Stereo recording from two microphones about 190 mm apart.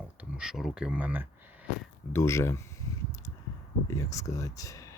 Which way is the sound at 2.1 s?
15° left (ahead or behind).